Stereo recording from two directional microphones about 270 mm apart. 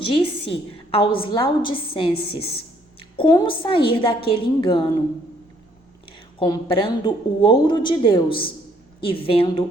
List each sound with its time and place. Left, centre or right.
0.0 s a woman's voice: centre
6.1 s a woman's voice: centre